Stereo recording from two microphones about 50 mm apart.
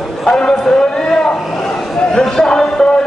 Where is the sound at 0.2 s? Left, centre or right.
Centre.